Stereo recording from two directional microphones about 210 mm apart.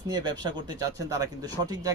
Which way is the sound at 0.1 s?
20° right (ahead or behind).